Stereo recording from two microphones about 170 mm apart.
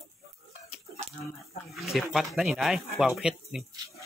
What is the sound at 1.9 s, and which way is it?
Speech, centre (ahead or behind).